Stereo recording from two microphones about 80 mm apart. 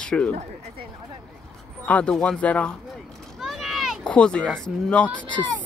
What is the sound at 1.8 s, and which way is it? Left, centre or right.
Speech, centre.